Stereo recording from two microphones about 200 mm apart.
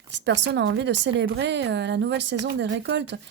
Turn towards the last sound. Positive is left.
turn(degrees=-65)  # may be behind; listen again after turning